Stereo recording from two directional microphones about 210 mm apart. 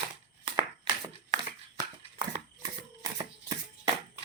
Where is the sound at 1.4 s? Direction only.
20° right (ahead or behind).